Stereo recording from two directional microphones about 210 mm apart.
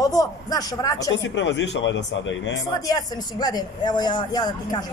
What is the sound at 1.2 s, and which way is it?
A man's voice, 60° left (ahead or behind).